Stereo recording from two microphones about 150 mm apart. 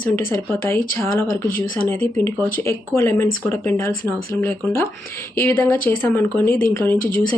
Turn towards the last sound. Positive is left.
turn(degrees=65)  # may be behind; listen again after turning